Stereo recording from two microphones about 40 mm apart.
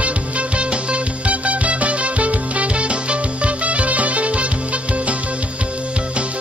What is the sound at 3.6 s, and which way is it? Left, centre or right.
Music, right.